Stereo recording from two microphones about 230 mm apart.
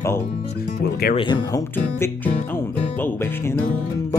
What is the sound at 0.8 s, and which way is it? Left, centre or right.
Speech, left.